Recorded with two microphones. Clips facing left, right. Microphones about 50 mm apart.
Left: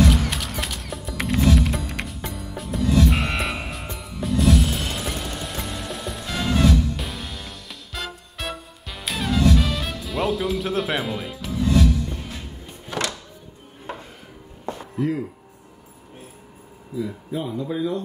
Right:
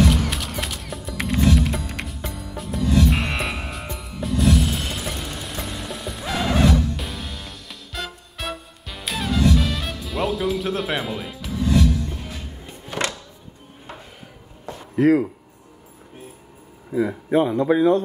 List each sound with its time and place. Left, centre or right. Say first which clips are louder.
0.1 s music: right 1 dB; centre
13.0 s music: right 3 dB; right
15.0 s a man's voice: right 9 dB; right
16.9 s a man's voice: right 8 dB; right